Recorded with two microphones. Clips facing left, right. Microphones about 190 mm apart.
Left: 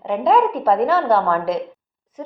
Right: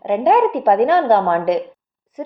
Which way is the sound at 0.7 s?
65° right (ahead or behind).